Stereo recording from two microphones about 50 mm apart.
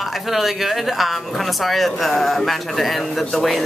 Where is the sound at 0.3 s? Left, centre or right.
Centre.